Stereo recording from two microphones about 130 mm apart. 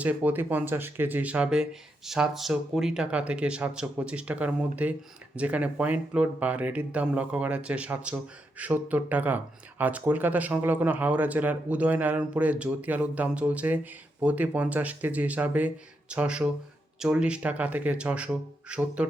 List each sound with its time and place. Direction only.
0.0 s speech: 10° right (ahead or behind)